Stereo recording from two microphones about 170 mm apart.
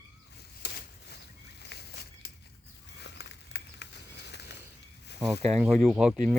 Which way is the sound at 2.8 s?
90° left.